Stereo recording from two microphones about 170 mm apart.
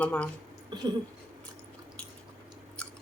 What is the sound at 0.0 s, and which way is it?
Speech, 10° left (ahead or behind).